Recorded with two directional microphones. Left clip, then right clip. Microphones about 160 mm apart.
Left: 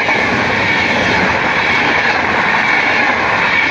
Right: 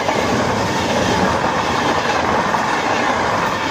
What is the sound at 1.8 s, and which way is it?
Train, 30° left (ahead or behind).